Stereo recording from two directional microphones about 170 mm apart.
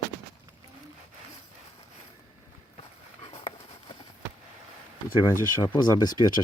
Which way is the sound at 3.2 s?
35° left (ahead or behind).